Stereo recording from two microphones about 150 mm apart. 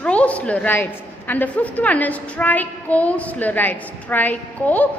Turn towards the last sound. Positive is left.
turn(degrees=10)  # may be behind; listen again after turning